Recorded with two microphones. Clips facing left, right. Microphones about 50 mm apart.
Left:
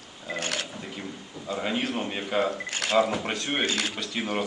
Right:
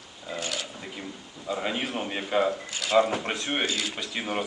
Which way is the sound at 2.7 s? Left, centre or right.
Left.